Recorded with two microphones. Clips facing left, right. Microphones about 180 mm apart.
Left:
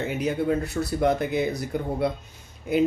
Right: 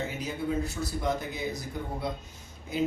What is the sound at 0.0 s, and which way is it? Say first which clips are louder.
Speech: left 7 dB; 65° left (ahead or behind).